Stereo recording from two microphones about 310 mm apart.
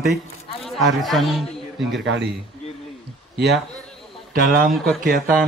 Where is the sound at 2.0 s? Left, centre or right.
Right.